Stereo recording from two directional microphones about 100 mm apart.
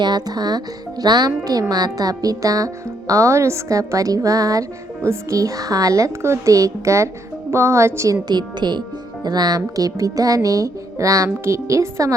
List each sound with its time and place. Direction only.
0.0 s speech: 45° right (ahead or behind)
8.3 s speech: 45° right (ahead or behind); by 12.1 s 30° right (ahead or behind)